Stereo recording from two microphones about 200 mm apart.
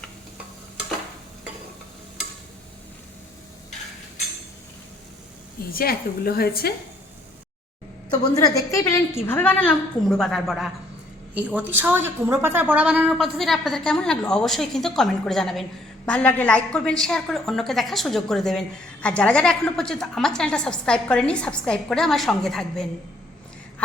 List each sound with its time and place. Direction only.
5.7 s a woman's voice: 50° left (ahead or behind)
8.1 s a woman's voice: 20° left (ahead or behind); by 10.7 s centre (ahead or behind)
11.7 s a woman's voice: 10° right (ahead or behind)